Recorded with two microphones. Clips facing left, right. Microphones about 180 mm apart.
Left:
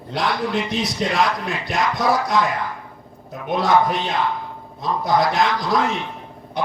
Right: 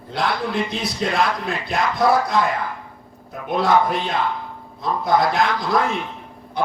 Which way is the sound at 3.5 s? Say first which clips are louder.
Even; 55° right (ahead or behind).